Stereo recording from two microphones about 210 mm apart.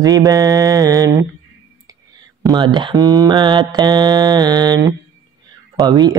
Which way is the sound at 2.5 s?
20° right (ahead or behind).